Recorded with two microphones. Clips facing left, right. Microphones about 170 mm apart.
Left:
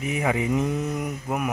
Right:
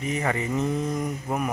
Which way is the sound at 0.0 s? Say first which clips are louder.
Left 2 dB; 10° left (ahead or behind).